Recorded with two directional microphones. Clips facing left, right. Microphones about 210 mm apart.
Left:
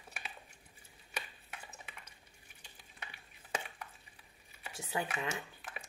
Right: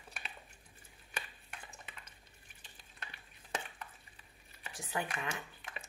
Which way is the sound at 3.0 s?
10° left (ahead or behind).